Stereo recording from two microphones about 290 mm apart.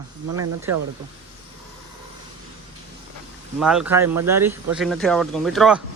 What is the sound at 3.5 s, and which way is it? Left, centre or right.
A man's voice, centre.